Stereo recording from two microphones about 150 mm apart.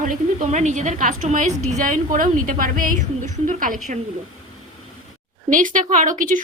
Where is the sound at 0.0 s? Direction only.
50° right (ahead or behind).